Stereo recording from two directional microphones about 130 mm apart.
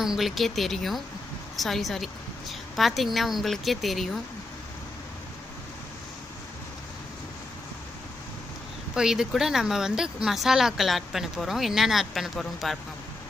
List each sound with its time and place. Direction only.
0.0 s speech: centre (ahead or behind)
8.9 s speech: 5° right (ahead or behind)